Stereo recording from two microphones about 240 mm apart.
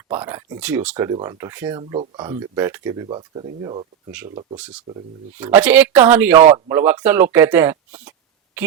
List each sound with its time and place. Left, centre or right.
0.1 s speech: centre
4.5 s speech: centre
6.3 s speech: right
6.7 s speech: centre